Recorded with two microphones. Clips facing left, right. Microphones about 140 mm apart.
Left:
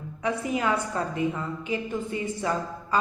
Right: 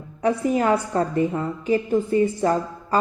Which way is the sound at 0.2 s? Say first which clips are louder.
Right 7 dB; 40° right (ahead or behind).